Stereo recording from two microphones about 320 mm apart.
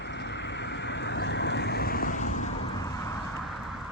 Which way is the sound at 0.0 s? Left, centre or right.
Left.